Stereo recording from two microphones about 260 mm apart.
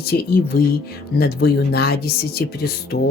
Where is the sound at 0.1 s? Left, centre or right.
Left.